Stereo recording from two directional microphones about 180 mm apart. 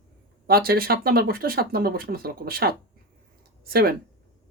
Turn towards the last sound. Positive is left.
turn(degrees=-55)  # may be behind; listen again after turning